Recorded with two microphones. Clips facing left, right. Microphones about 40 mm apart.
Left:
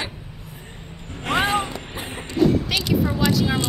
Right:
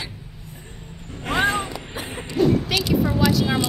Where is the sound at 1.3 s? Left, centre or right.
Left.